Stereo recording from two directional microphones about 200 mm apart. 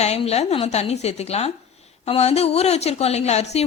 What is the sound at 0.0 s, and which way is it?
A woman's voice, 30° left (ahead or behind).